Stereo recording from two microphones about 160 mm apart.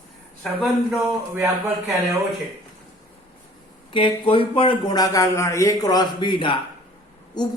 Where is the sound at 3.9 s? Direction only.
35° left (ahead or behind).